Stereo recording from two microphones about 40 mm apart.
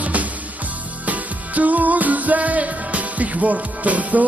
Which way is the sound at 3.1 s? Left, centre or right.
Right.